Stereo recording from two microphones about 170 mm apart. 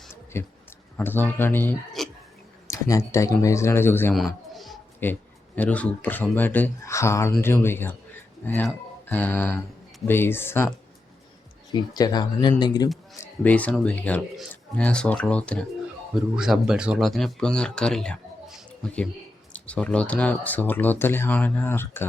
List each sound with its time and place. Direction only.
0.3 s speech: 15° left (ahead or behind)
2.0 s a sound: centre (ahead or behind)
2.6 s speech: 20° left (ahead or behind)
4.5 s a sound: centre (ahead or behind)
5.0 s speech: 10° left (ahead or behind)
11.7 s speech: 25° left (ahead or behind)
13.4 s speech: 10° left (ahead or behind)
16.3 s speech: 5° right (ahead or behind); by 22.0 s 15° left (ahead or behind)